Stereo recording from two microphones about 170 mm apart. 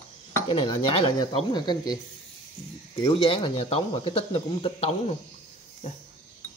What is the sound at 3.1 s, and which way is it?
Speech, 30° left (ahead or behind).